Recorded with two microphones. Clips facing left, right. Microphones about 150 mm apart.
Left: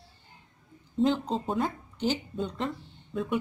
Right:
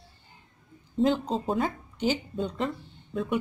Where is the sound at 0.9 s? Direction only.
Centre (ahead or behind).